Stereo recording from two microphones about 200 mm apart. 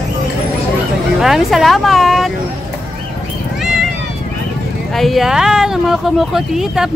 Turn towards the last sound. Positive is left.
turn(degrees=0)  # may be behind; listen again after turning